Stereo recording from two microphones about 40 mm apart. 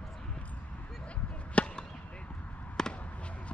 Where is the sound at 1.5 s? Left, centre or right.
Left.